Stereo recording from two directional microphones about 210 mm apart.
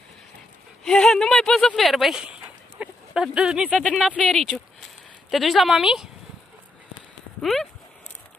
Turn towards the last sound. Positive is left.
turn(degrees=0)  # may be behind; listen again after turning